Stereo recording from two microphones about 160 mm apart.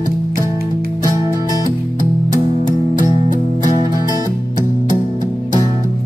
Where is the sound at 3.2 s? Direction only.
25° right (ahead or behind).